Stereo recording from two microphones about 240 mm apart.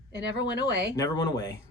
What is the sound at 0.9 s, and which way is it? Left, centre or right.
Speech, centre.